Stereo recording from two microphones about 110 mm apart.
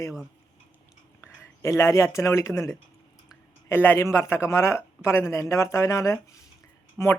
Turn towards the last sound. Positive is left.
turn(degrees=25)  # may be behind; listen again after turning